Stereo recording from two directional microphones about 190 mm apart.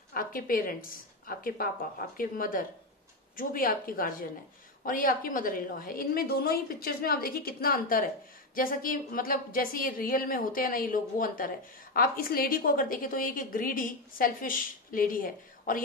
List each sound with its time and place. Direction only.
0.1 s a woman's voice: 50° left (ahead or behind)